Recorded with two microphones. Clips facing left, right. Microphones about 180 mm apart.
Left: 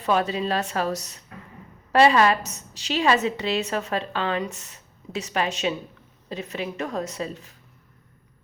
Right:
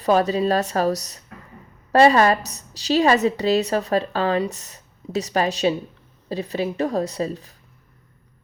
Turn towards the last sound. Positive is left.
turn(degrees=-35)  # may be behind; listen again after turning